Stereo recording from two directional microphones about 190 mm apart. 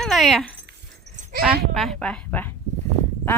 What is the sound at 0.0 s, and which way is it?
Speech, centre (ahead or behind).